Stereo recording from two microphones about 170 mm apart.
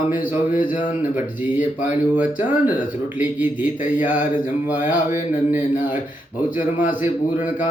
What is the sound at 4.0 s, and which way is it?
Speech, 10° right (ahead or behind).